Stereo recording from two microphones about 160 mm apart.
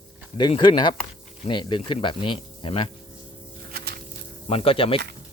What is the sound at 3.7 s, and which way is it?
Walk, 75° right (ahead or behind).